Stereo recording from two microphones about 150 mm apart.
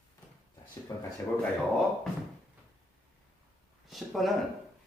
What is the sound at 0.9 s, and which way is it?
Speech, 20° left (ahead or behind).